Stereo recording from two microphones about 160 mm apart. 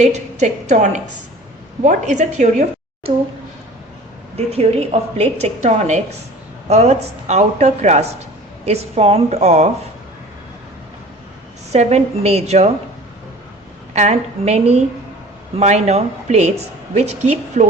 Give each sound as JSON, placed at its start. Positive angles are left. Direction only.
{"t": 0.0, "sound": "a woman's voice", "side_deg": -45}
{"t": 4.4, "sound": "a woman's voice", "side_deg": -40}
{"t": 11.7, "sound": "a woman's voice", "side_deg": -45}
{"t": 13.9, "sound": "a woman's voice", "side_deg": -45}